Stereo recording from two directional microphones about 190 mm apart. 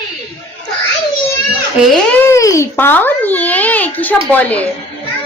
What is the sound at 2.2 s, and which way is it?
A child's voice, 15° left (ahead or behind).